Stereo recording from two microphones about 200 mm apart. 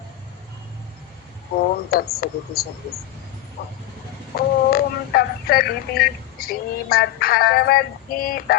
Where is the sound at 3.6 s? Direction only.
65° left (ahead or behind).